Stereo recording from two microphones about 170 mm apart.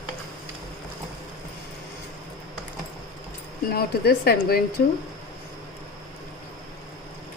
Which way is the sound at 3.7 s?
65° left (ahead or behind).